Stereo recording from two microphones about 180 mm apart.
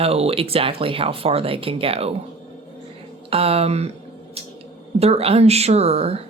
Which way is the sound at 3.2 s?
30° right (ahead or behind).